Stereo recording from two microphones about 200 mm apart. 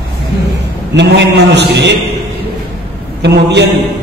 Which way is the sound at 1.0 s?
60° right (ahead or behind).